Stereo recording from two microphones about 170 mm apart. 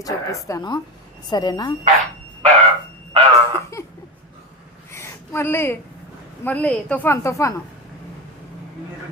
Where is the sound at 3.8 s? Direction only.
15° left (ahead or behind).